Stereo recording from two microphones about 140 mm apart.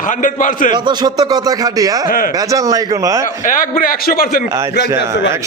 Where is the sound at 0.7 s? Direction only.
30° right (ahead or behind).